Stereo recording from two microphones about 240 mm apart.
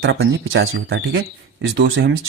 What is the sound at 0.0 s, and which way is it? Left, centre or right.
Speech, right.